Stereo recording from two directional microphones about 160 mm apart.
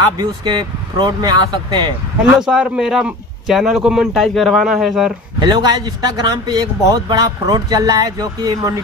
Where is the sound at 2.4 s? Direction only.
5° right (ahead or behind).